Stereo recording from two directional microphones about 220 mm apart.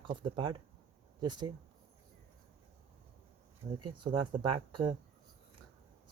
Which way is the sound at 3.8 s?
25° right (ahead or behind).